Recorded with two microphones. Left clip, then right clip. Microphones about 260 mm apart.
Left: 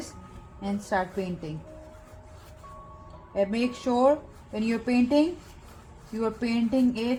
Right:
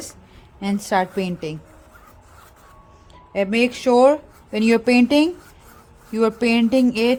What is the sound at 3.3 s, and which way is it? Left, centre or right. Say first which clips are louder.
Speech: right 7 dB; right.